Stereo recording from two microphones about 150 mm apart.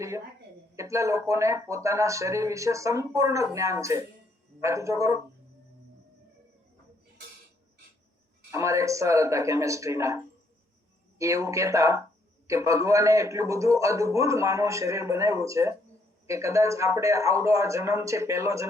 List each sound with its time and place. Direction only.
0.8 s speech: 20° right (ahead or behind)
8.5 s speech: 20° right (ahead or behind)
11.2 s speech: 20° right (ahead or behind)